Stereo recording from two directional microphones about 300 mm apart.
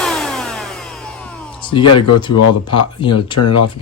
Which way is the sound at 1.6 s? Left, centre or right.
Centre.